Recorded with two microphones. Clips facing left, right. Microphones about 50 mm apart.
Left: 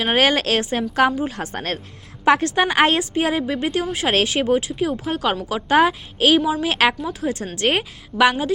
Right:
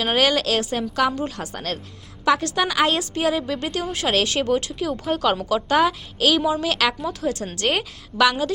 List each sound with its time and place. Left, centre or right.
0.1 s a woman's voice: left; by 4.9 s centre
4.9 s speech: centre
5.5 s a woman's voice: left
6.4 s speech: centre
6.7 s a woman's voice: left
7.1 s speech: centre
7.5 s a woman's voice: left